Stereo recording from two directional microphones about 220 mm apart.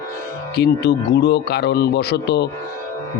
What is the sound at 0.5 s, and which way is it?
Speech, 45° left (ahead or behind).